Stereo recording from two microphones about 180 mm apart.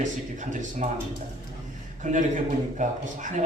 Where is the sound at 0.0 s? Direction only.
45° right (ahead or behind).